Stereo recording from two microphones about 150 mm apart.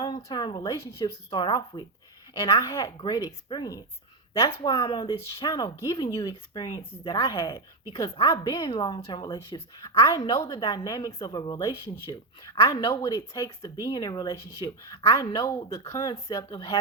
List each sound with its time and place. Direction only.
0.2 s a woman's voice: 30° left (ahead or behind)
1.3 s a woman's voice: 30° left (ahead or behind)